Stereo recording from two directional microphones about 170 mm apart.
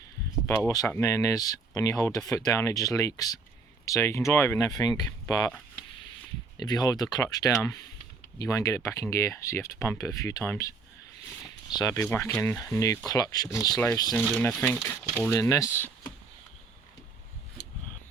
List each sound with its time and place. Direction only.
0.4 s speech: 15° left (ahead or behind)
6.6 s speech: 25° left (ahead or behind)
11.7 s speech: 20° left (ahead or behind)
14.5 s speech: 5° left (ahead or behind)